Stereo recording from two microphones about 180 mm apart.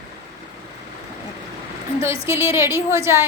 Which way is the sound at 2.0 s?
15° right (ahead or behind).